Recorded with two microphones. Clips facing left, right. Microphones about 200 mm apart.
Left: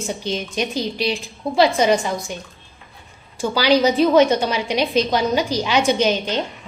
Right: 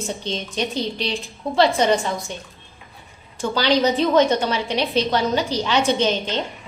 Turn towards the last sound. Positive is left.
turn(degrees=10)  # may be behind; listen again after turning